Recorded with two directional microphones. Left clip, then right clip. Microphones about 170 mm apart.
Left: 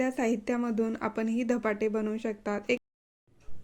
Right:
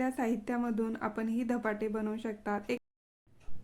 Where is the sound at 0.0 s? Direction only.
20° left (ahead or behind).